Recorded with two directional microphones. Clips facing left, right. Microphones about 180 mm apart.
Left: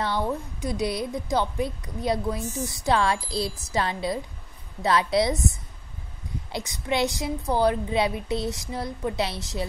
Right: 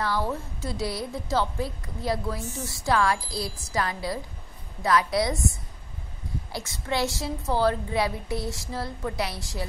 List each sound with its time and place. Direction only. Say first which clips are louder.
0.0 s a woman's voice: left 1 dB; 20° left (ahead or behind)
6.5 s a woman's voice: left 3 dB; 20° left (ahead or behind)